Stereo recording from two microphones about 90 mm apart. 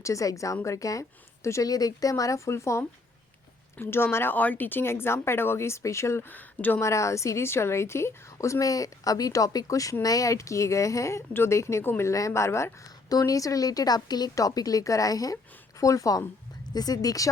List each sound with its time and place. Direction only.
0.0 s a woman's voice: 35° left (ahead or behind); by 6.8 s 20° left (ahead or behind)
6.8 s a woman's voice: 35° left (ahead or behind)
13.1 s a woman's voice: 40° left (ahead or behind)